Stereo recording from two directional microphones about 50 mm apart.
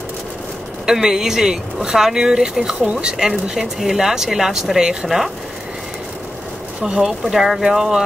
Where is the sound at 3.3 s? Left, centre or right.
Centre.